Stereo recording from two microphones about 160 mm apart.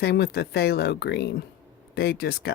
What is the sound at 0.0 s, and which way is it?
Speech, 90° left.